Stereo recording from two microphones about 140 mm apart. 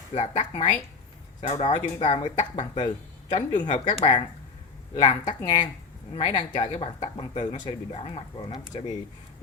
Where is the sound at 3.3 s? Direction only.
60° left (ahead or behind).